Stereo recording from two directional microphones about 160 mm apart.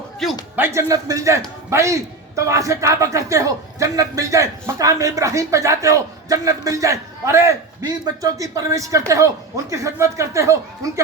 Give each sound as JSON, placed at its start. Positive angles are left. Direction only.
{"t": 0.5, "sound": "a man's voice", "side_deg": -15}